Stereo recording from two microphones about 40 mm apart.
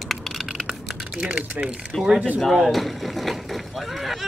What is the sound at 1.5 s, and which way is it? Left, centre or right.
Speech, right.